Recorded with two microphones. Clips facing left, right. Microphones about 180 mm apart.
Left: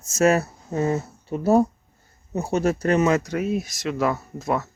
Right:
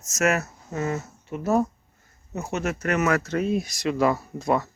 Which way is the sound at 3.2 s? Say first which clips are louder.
Even; 10° left (ahead or behind).